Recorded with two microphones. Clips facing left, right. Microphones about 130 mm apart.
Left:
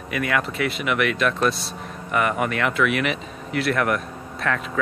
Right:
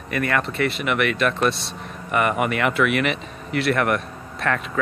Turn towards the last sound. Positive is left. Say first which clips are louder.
# right 1 dB
turn(degrees=0)  # may be behind; listen again after turning